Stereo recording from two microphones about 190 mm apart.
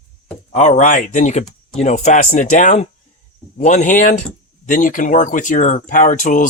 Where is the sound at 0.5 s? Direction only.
40° left (ahead or behind).